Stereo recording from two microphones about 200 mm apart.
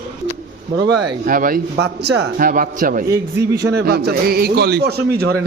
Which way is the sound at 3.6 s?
55° right (ahead or behind).